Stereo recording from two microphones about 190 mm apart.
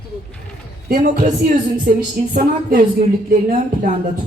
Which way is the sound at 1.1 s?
40° right (ahead or behind).